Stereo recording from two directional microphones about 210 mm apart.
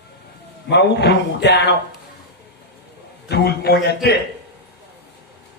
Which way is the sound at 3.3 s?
50° left (ahead or behind).